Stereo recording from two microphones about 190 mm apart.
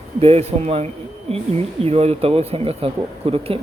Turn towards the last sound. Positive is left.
turn(degrees=-30)  # may be behind; listen again after turning